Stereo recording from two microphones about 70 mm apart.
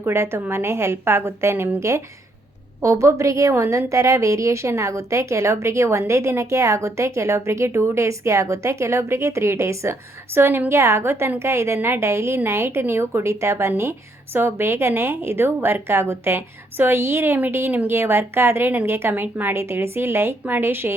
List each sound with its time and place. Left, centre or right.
0.0 s a woman's voice: right
2.8 s a woman's voice: right